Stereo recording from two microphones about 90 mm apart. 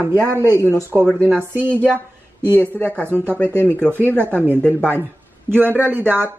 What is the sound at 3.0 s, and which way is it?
Speech, 25° right (ahead or behind).